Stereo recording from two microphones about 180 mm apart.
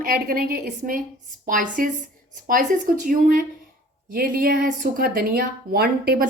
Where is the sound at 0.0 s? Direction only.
55° right (ahead or behind).